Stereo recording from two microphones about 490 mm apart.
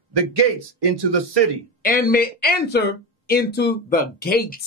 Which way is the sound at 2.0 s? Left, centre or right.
Centre.